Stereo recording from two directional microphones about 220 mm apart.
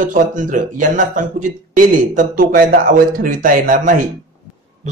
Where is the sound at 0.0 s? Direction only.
35° right (ahead or behind).